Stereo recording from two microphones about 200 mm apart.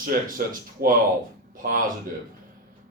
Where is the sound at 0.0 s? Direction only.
45° right (ahead or behind).